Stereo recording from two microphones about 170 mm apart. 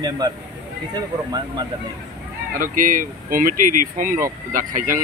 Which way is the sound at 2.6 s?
50° right (ahead or behind).